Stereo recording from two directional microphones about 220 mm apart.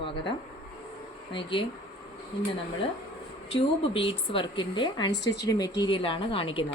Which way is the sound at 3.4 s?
25° left (ahead or behind).